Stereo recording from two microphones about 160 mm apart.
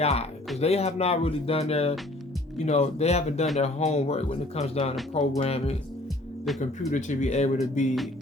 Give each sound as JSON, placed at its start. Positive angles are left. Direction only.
{"t": 0.0, "sound": "speech", "side_deg": 40}